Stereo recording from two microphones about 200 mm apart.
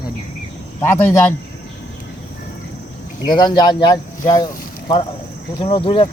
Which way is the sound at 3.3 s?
20° left (ahead or behind).